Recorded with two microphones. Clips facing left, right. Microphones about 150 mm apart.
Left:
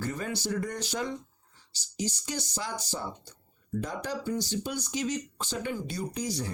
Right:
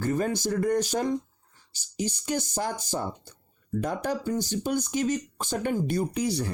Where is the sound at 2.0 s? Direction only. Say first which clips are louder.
Right 5 dB; 55° right (ahead or behind).